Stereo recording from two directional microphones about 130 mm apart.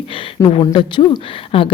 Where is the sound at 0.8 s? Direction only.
40° left (ahead or behind).